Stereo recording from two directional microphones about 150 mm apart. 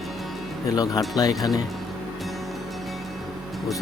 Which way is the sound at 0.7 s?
25° left (ahead or behind).